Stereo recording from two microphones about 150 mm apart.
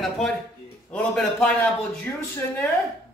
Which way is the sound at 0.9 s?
10° left (ahead or behind).